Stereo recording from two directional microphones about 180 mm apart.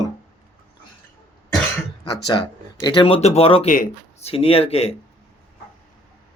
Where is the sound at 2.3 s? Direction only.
20° left (ahead or behind).